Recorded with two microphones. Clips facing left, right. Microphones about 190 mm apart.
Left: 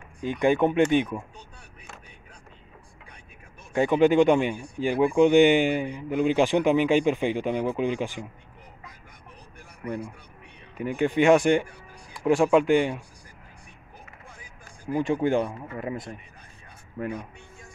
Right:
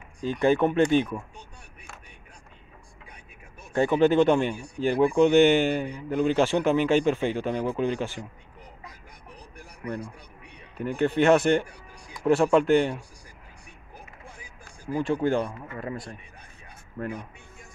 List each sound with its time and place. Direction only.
0.2 s speech: 15° left (ahead or behind)
3.7 s speech: 15° left (ahead or behind)
10.8 s speech: 10° left (ahead or behind)
14.9 s speech: 15° left (ahead or behind)